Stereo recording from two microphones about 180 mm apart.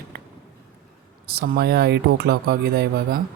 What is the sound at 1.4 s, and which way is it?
Speech, 55° right (ahead or behind).